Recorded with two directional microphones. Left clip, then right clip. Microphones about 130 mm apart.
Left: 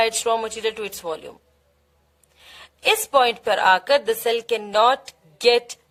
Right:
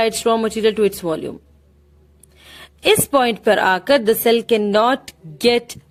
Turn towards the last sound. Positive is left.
turn(degrees=-30)  # may be behind; listen again after turning